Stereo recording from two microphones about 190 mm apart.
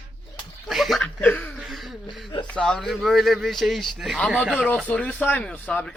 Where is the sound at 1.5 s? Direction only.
Centre (ahead or behind).